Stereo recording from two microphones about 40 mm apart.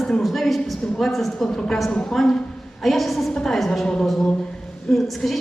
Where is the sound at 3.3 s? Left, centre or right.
Centre.